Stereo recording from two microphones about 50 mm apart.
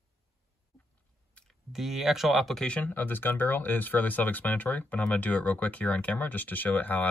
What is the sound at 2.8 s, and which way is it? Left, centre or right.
Speech, left.